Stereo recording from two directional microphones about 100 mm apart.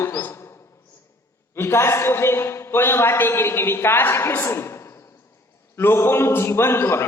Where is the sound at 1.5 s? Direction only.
25° left (ahead or behind).